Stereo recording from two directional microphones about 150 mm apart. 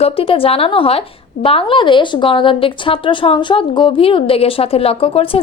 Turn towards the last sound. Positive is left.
turn(degrees=40)  # may be behind; listen again after turning